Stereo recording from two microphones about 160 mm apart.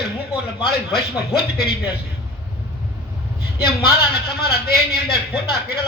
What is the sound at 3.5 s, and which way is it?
A man's voice, 75° left (ahead or behind).